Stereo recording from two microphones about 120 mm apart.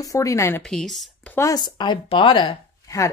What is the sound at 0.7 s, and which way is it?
Speech, 5° left (ahead or behind).